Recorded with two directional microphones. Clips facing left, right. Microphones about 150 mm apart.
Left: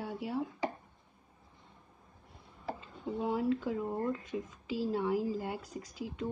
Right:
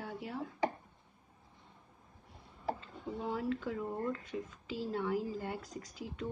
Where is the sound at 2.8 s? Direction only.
10° left (ahead or behind).